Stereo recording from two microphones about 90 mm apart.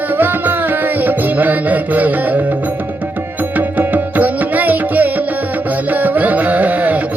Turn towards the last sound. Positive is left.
turn(degrees=-15)  # may be behind; listen again after turning